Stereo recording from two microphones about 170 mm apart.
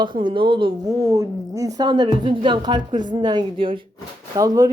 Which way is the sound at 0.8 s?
20° right (ahead or behind).